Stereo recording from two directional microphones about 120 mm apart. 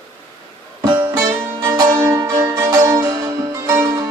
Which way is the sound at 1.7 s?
25° right (ahead or behind).